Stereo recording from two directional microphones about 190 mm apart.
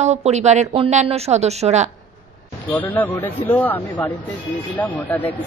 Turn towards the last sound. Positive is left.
turn(degrees=10)  # may be behind; listen again after turning